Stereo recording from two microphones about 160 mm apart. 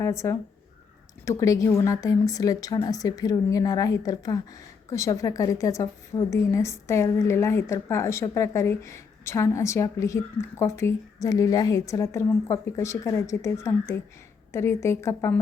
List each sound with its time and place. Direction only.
0.0 s a woman's voice: 20° left (ahead or behind)